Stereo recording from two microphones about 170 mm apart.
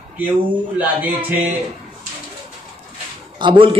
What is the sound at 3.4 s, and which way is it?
Speech, 30° right (ahead or behind).